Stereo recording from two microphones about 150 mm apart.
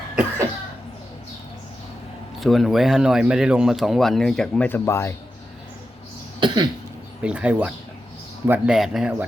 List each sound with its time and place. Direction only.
2.4 s speech: centre (ahead or behind); by 5.1 s 20° left (ahead or behind)
6.4 s cough: 30° right (ahead or behind)
7.2 s speech: 10° right (ahead or behind)